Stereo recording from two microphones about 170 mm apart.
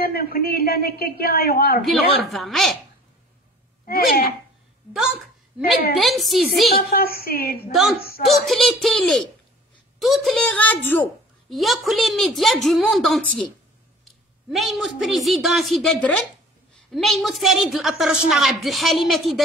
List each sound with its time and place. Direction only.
0.0 s a man's voice: 65° left (ahead or behind)
1.9 s a woman's voice: centre (ahead or behind)
3.8 s a man's voice: 60° left (ahead or behind)
4.9 s a woman's voice: centre (ahead or behind)
6.8 s a man's voice: 65° left (ahead or behind)
8.3 s a woman's voice: centre (ahead or behind)
11.4 s a woman's voice: centre (ahead or behind)
14.5 s a woman's voice: centre (ahead or behind)